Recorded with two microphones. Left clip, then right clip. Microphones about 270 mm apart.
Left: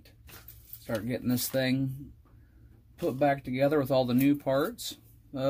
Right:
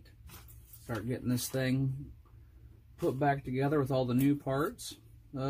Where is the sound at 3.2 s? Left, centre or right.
Left.